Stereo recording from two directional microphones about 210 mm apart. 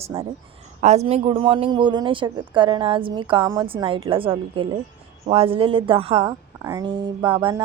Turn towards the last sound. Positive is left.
turn(degrees=-20)  # may be behind; listen again after turning